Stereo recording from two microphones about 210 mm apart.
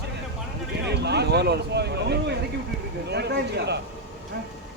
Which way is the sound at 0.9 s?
50° right (ahead or behind).